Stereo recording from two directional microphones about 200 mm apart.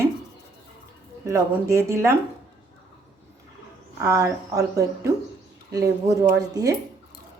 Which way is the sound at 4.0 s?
15° right (ahead or behind).